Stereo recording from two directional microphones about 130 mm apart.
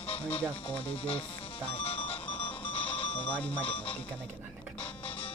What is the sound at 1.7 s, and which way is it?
Music, 45° left (ahead or behind).